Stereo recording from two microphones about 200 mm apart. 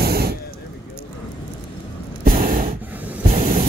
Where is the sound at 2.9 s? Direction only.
10° right (ahead or behind).